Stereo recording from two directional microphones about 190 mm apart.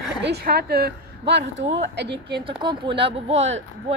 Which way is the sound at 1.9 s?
65° right (ahead or behind).